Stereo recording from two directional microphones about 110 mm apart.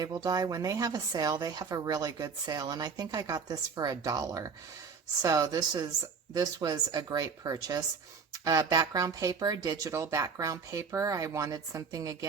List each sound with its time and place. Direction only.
0.0 s speech: 35° right (ahead or behind)
9.9 s speech: 25° right (ahead or behind)